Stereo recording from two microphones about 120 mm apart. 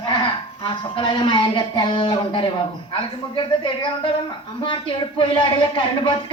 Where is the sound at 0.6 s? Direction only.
45° left (ahead or behind).